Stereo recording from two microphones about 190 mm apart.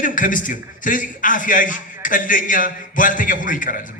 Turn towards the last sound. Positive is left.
turn(degrees=45)  # may be behind; listen again after turning